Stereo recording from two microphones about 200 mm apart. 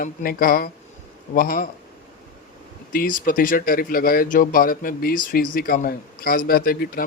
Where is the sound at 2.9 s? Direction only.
45° left (ahead or behind).